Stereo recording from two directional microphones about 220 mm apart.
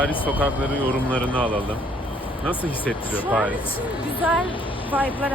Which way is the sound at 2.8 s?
10° left (ahead or behind).